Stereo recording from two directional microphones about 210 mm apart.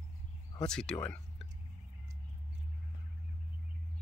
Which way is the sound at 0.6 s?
5° left (ahead or behind).